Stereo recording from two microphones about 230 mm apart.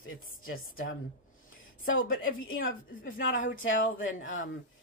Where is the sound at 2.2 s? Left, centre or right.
Left.